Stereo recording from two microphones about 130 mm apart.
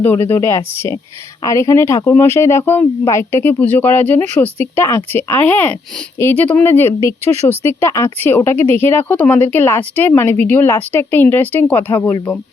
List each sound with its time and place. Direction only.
0.0 s speech: 15° left (ahead or behind)